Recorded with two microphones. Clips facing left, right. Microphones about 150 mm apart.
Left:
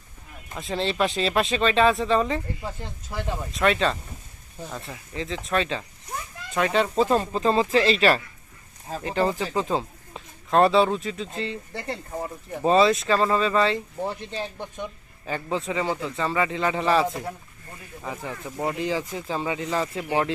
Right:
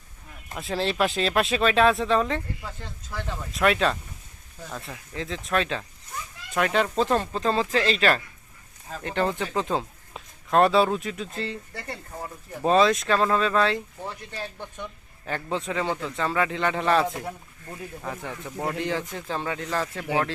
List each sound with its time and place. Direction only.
0.5 s speech: centre (ahead or behind)
2.6 s speech: 20° left (ahead or behind)
3.5 s speech: centre (ahead or behind)
11.7 s speech: 25° left (ahead or behind)
12.6 s speech: centre (ahead or behind)
14.0 s speech: 30° left (ahead or behind)
14.3 s speech: 20° left (ahead or behind)
15.3 s speech: 5° left (ahead or behind)